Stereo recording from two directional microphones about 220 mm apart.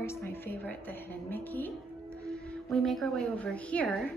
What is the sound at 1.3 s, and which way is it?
Music, 10° left (ahead or behind).